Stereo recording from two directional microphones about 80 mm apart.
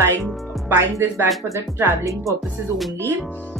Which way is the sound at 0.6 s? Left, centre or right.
Right.